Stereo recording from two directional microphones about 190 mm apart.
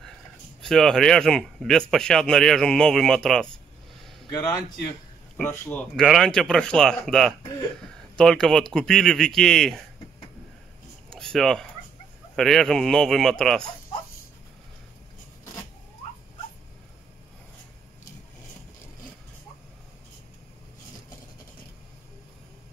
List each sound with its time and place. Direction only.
0.6 s speech: centre (ahead or behind)
4.3 s speech: 20° left (ahead or behind); by 9.8 s centre (ahead or behind)
11.1 s a sound: 5° left (ahead or behind)
12.4 s speech: centre (ahead or behind)